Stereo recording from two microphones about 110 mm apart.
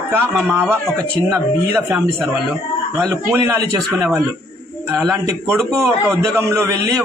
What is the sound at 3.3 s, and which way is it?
Speech, 25° right (ahead or behind).